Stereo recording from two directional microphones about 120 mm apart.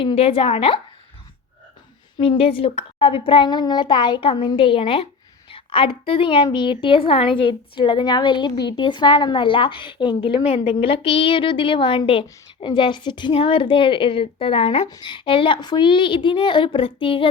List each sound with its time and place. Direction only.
0.0 s a woman's voice: 50° left (ahead or behind)
2.1 s a woman's voice: 45° left (ahead or behind)
14.8 s a woman's voice: 35° left (ahead or behind)